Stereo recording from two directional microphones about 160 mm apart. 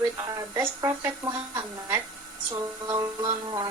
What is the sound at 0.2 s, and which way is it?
Speech, 20° right (ahead or behind).